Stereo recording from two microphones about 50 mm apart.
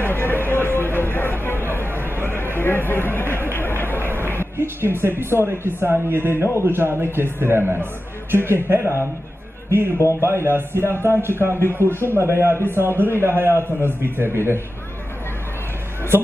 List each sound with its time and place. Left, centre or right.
0.0 s a sound: left
3.5 s music: left
4.6 s a man's voice: right